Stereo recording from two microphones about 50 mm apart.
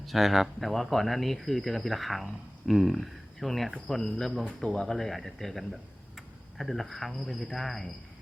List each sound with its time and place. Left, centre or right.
0.0 s speech: centre
4.4 s speech: centre
6.1 s cricket: centre
7.2 s speech: centre